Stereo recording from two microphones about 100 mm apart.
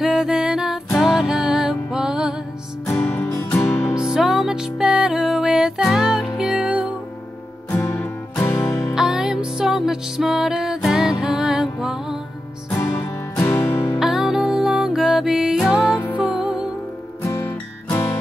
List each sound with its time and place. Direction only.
0.0 s music: 5° right (ahead or behind)
3.0 s music: 20° left (ahead or behind)
3.9 s music: 5° right (ahead or behind)
7.7 s music: 30° left (ahead or behind)
8.9 s music: 5° right (ahead or behind)
13.0 s music: 20° left (ahead or behind)
13.9 s music: 5° right (ahead or behind)
17.2 s music: 30° left (ahead or behind)